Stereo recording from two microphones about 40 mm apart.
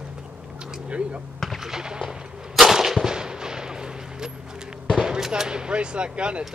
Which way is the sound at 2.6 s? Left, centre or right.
Centre.